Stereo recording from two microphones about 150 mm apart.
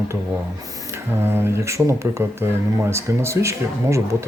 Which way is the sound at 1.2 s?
15° right (ahead or behind).